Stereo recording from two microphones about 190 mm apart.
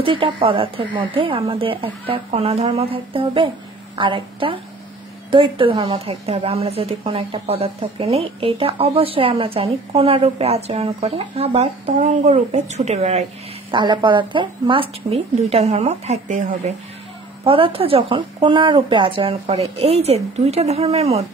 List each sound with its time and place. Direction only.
0.0 s a woman's voice: 25° right (ahead or behind); by 16.7 s 40° right (ahead or behind)
17.5 s speech: 30° right (ahead or behind)